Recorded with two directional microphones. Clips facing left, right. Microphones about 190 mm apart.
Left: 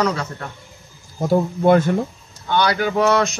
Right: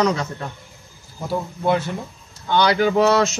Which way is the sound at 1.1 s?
45° left (ahead or behind).